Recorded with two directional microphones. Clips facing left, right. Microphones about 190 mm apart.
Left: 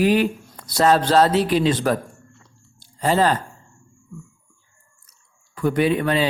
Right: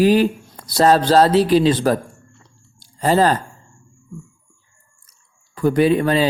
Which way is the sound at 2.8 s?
40° right (ahead or behind).